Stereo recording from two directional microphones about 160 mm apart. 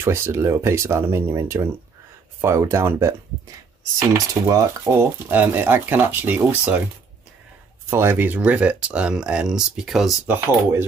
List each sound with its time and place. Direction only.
0.0 s speech: 15° right (ahead or behind)
4.3 s speech: 20° right (ahead or behind)
7.9 s speech: 15° right (ahead or behind)
10.3 s speech: 15° right (ahead or behind)